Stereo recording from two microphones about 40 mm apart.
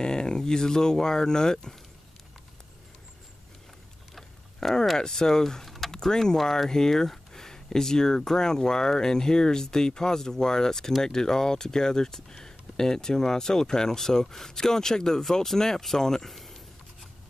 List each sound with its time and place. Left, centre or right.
0.0 s speech: centre
4.1 s vehicle: centre
4.9 s speech: centre
16.3 s a sound: centre